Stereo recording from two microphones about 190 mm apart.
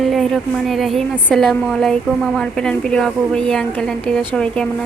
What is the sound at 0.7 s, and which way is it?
A woman's voice, centre (ahead or behind).